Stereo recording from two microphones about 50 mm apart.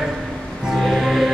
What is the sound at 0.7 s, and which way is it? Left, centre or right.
Music, centre.